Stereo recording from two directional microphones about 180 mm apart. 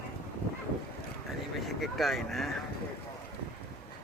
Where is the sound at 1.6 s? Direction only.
Centre (ahead or behind).